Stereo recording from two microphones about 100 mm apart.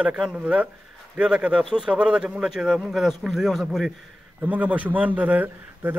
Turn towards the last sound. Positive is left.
turn(degrees=-15)  # may be behind; listen again after turning